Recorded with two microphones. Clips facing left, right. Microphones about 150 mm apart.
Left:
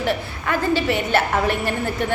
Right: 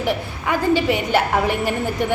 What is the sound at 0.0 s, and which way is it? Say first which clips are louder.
A woman's voice: right 1 dB; 15° right (ahead or behind).